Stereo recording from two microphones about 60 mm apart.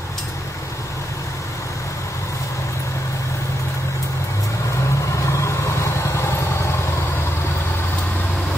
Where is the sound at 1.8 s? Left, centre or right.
Left.